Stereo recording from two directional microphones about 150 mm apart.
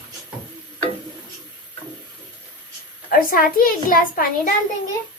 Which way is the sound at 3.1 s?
75° left (ahead or behind).